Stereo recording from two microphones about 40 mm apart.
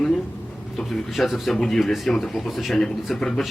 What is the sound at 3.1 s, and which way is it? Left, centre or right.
Speech, centre.